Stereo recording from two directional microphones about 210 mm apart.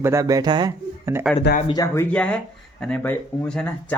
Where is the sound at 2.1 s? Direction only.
5° left (ahead or behind).